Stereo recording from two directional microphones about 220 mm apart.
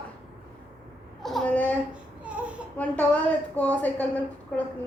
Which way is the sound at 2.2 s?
5° right (ahead or behind).